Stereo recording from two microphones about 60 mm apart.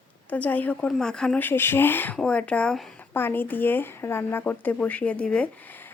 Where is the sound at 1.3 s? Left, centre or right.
Left.